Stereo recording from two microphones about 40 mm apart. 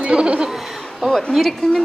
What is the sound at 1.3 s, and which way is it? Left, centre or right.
Speech, centre.